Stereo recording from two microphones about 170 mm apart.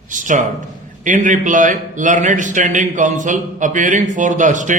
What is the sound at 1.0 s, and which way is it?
A man's voice, 50° right (ahead or behind).